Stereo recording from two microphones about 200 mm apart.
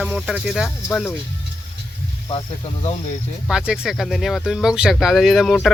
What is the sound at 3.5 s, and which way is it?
Speech, 5° right (ahead or behind).